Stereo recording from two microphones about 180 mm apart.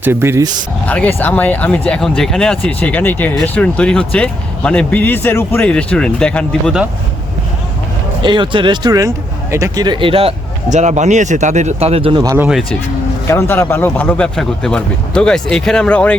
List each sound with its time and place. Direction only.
0.0 s speech: 15° right (ahead or behind)
0.9 s speech: 10° left (ahead or behind)
8.2 s speech: 25° right (ahead or behind)
12.2 s speech: 15° right (ahead or behind)
13.2 s speech: 15° left (ahead or behind)